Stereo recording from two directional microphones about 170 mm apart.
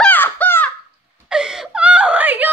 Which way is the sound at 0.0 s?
10° left (ahead or behind).